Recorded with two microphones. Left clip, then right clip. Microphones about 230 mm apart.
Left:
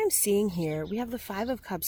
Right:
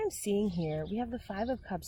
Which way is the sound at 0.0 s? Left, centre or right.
Left.